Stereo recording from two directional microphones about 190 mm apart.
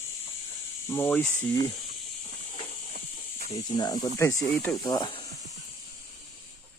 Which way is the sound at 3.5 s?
20° left (ahead or behind).